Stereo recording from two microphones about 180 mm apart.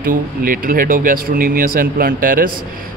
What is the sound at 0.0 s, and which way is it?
Speech, 50° right (ahead or behind).